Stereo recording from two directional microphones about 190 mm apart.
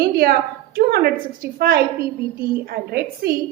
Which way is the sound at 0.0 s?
55° right (ahead or behind).